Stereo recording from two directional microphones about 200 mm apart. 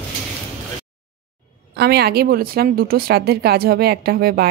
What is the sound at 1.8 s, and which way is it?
Speech, 55° right (ahead or behind).